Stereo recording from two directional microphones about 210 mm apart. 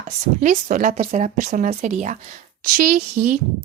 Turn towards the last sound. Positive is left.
turn(degrees=-40)  # may be behind; listen again after turning